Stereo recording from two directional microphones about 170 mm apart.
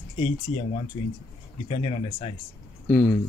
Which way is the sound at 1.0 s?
35° left (ahead or behind).